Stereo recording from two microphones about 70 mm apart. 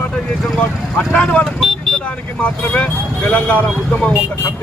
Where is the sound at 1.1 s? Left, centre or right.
Centre.